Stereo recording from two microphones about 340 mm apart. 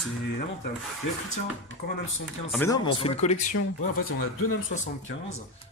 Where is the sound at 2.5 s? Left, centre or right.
Centre.